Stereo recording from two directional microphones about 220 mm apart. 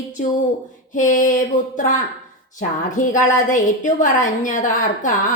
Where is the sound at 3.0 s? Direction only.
35° left (ahead or behind).